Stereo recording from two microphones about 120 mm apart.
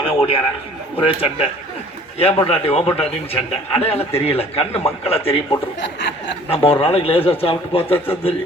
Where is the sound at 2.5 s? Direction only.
55° left (ahead or behind).